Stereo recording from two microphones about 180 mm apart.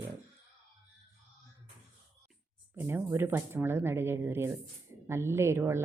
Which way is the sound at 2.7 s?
10° right (ahead or behind).